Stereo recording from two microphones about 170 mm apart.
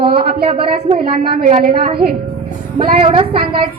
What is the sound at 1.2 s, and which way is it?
Speech, 65° right (ahead or behind).